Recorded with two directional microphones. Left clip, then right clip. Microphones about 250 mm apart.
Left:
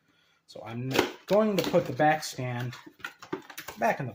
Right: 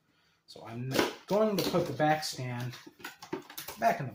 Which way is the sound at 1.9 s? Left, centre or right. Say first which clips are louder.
Left 4 dB; left.